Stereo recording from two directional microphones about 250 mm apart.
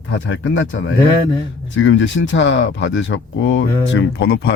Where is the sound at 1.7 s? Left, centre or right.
Left.